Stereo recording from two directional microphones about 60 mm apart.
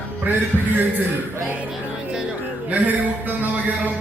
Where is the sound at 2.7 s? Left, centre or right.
Right.